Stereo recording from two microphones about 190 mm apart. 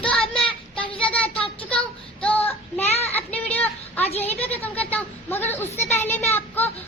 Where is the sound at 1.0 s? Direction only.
5° left (ahead or behind).